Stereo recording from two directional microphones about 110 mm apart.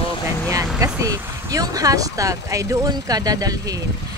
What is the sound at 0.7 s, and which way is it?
Speech, 30° right (ahead or behind).